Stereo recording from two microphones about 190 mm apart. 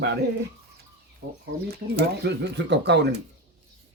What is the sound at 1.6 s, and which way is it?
Speech, 65° right (ahead or behind).